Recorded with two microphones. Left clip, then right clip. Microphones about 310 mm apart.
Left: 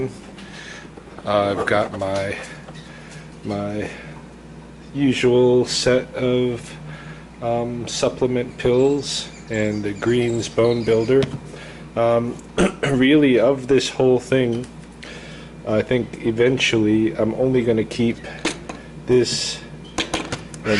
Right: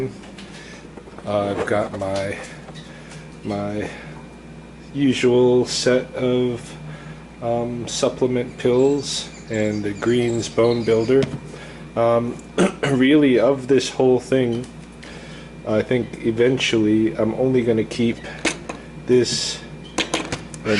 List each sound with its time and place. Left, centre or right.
1.3 s speech: centre
3.5 s speech: centre
4.9 s speech: centre
5.3 s speech: right
5.6 s speech: centre
15.7 s speech: centre
20.0 s a sound: centre